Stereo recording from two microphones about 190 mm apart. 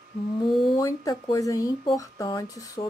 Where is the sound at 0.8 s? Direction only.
20° left (ahead or behind).